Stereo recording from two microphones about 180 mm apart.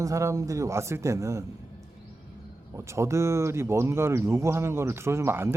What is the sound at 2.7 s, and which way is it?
Speech, 15° right (ahead or behind).